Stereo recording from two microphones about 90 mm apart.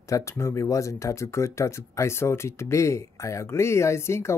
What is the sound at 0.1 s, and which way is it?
Speech, 35° left (ahead or behind).